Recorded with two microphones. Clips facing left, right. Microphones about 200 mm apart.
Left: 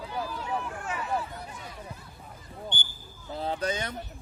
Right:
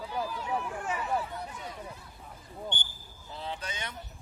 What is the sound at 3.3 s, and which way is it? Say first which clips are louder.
Speech: left 9 dB; 40° left (ahead or behind).